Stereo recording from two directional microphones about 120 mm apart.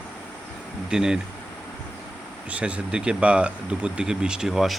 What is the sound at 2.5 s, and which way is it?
Speech, 10° right (ahead or behind).